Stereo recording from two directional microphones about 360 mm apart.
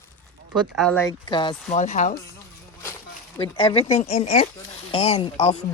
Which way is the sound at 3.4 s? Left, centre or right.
Centre.